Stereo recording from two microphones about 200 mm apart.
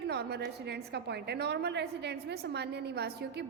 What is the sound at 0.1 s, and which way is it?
A woman's voice, 55° right (ahead or behind).